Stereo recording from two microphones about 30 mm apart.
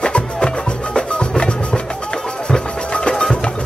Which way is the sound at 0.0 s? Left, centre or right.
Left.